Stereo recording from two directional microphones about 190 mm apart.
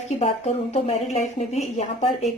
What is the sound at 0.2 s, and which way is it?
Speech, 35° left (ahead or behind).